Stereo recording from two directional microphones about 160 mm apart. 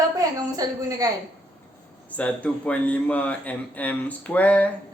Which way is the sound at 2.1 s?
10° left (ahead or behind).